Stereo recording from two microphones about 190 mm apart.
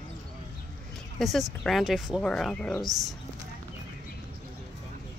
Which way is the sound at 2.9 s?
20° right (ahead or behind).